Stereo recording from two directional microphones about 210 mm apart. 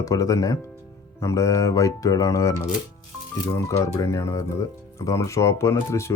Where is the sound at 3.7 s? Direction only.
15° left (ahead or behind).